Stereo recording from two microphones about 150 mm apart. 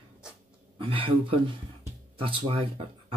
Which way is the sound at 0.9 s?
35° right (ahead or behind).